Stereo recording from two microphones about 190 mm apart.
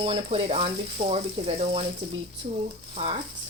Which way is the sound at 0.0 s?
30° right (ahead or behind).